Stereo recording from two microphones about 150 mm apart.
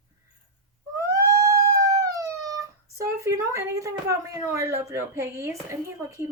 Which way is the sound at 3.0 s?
20° right (ahead or behind).